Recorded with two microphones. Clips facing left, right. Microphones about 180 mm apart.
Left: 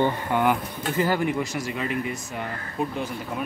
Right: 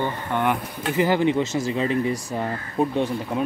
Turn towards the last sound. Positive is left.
turn(degrees=-30)  # may be behind; listen again after turning